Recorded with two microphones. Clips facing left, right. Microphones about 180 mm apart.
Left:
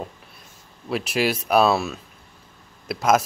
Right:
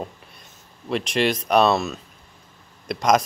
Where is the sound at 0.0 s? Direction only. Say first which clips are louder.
Right 1 dB; 5° left (ahead or behind).